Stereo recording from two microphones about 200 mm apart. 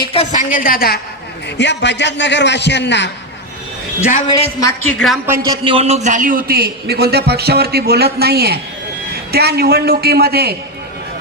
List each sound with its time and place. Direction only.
0.0 s a woman's voice: 30° left (ahead or behind); by 0.9 s 45° left (ahead or behind)
1.5 s a man's voice: 60° left (ahead or behind)
4.3 s speech: 20° left (ahead or behind)
4.9 s a woman's voice: centre (ahead or behind)
5.5 s a man's voice: 25° right (ahead or behind); by 10.5 s 50° right (ahead or behind)